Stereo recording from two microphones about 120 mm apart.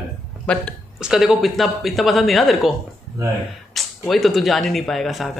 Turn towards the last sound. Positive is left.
turn(degrees=0)  # may be behind; listen again after turning